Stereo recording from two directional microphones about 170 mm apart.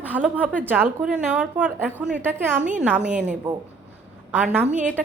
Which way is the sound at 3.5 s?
25° right (ahead or behind).